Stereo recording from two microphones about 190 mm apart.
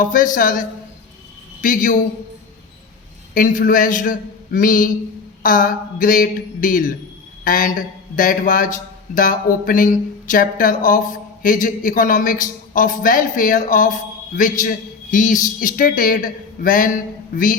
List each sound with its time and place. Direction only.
0.0 s speech: 45° left (ahead or behind)
1.6 s speech: 45° left (ahead or behind)
3.3 s speech: 45° left (ahead or behind)